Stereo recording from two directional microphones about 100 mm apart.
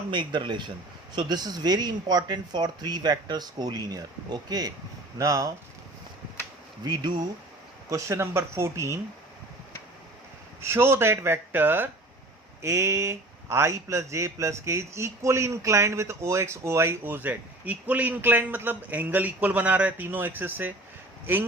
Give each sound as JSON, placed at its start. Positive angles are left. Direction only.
{"t": 0.1, "sound": "speech", "side_deg": -50}
{"t": 6.8, "sound": "speech", "side_deg": -45}
{"t": 7.9, "sound": "speech", "side_deg": -30}
{"t": 10.6, "sound": "speech", "side_deg": -25}